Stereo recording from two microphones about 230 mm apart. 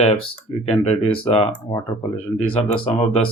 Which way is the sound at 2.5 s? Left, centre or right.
Left.